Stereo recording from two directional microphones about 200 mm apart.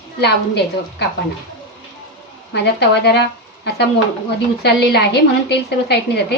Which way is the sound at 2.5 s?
55° left (ahead or behind).